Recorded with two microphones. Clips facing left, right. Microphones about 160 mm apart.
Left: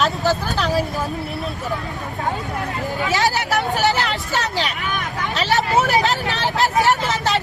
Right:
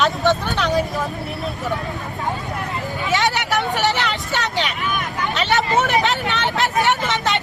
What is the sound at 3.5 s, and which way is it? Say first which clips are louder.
Speech: left 1 dB; centre (ahead or behind).